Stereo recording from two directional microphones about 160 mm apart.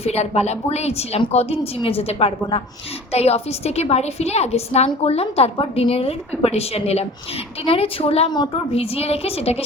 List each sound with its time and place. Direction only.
0.0 s a woman's voice: 40° left (ahead or behind)